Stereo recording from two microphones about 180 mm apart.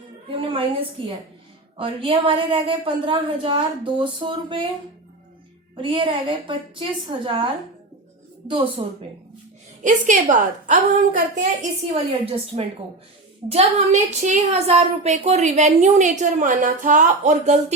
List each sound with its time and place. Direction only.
0.3 s a woman's voice: 30° right (ahead or behind)
5.7 s speech: 30° right (ahead or behind)
8.8 s speech: 25° right (ahead or behind)
9.8 s a woman's voice: 45° right (ahead or behind)
12.2 s speech: 35° right (ahead or behind)